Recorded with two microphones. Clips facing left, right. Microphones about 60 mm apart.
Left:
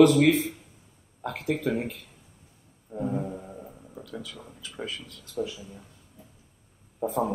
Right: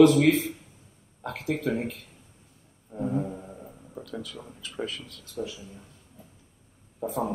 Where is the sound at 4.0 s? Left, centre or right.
Right.